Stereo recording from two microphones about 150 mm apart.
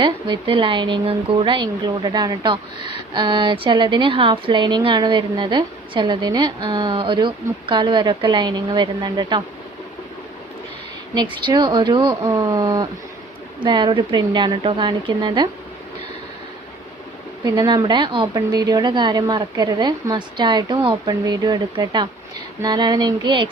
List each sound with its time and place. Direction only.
0.0 s a woman's voice: 35° right (ahead or behind)
11.4 s a woman's voice: 30° right (ahead or behind)
17.4 s a woman's voice: 25° right (ahead or behind)